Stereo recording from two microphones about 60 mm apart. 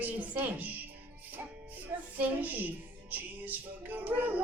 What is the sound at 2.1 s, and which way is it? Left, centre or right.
Music, right.